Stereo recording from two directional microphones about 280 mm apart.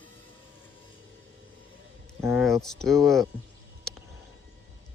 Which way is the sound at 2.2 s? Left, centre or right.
Centre.